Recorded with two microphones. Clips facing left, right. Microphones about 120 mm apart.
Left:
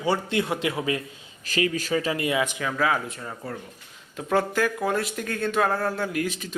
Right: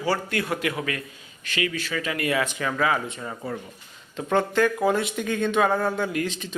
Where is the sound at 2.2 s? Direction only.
15° left (ahead or behind).